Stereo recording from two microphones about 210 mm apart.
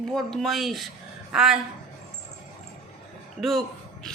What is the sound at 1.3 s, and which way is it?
Speech, 5° right (ahead or behind).